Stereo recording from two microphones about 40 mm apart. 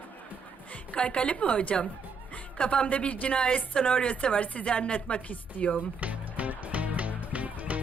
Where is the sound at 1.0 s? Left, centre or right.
Left.